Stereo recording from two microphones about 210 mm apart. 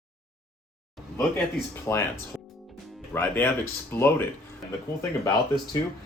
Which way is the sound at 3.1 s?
10° left (ahead or behind).